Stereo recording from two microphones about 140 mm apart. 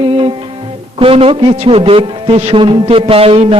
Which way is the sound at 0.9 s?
40° right (ahead or behind).